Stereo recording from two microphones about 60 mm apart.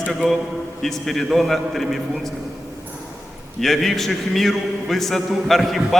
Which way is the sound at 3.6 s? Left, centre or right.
Centre.